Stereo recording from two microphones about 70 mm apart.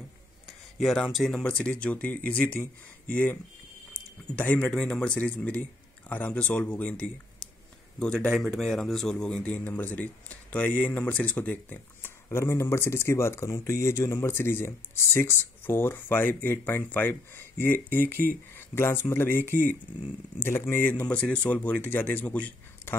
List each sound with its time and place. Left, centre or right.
0.5 s a sound: centre
1.2 s speech: centre
4.4 s a man's voice: centre
6.9 s a man's voice: centre
8.3 s speech: centre
9.4 s speech: left